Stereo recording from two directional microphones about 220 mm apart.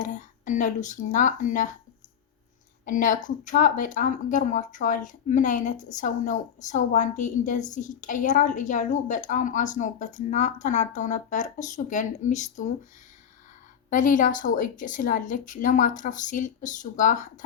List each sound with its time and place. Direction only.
0.0 s speech: 35° left (ahead or behind)
2.8 s speech: 35° left (ahead or behind)
13.9 s speech: 35° left (ahead or behind)